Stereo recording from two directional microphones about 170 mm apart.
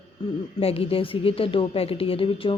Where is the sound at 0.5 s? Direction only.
35° left (ahead or behind).